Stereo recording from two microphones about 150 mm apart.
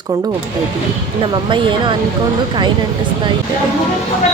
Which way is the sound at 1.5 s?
35° right (ahead or behind).